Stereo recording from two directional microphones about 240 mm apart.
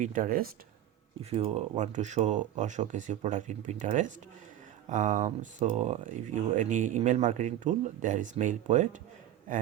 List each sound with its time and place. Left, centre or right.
0.0 s speech: right
1.2 s speech: right